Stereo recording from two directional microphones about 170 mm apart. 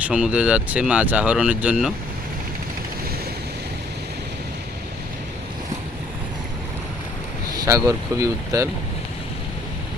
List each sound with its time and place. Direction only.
0.0 s speech: 5° right (ahead or behind)
7.5 s speech: 20° right (ahead or behind)